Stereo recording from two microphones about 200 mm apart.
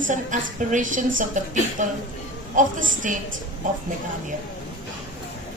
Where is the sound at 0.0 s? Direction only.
40° right (ahead or behind).